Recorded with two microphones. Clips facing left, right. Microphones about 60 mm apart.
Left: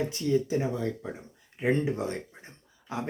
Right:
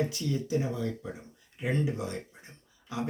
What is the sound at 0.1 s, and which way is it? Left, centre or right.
Speech, left.